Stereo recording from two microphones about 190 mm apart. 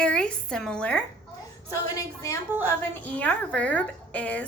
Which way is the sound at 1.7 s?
15° left (ahead or behind).